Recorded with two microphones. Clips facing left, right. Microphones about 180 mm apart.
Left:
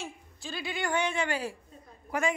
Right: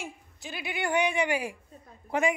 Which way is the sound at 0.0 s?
20° right (ahead or behind).